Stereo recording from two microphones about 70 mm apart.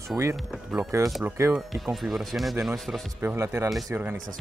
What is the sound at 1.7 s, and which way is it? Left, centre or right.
Speech, centre.